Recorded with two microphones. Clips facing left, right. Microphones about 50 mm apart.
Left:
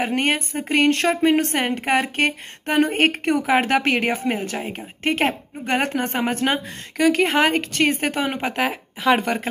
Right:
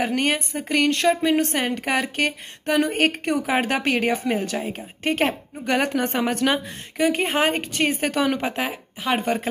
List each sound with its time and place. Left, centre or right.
0.0 s a woman's voice: left
7.0 s speech: left
8.5 s speech: left